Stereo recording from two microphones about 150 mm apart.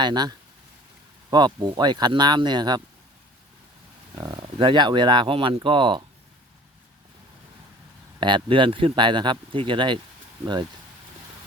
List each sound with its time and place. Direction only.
0.0 s speech: 30° right (ahead or behind)
4.2 s speech: 30° right (ahead or behind)
8.2 s speech: 30° right (ahead or behind)